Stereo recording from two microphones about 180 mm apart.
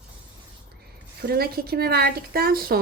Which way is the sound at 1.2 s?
60° right (ahead or behind).